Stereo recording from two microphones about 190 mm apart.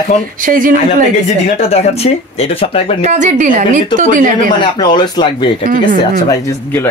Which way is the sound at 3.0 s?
40° right (ahead or behind).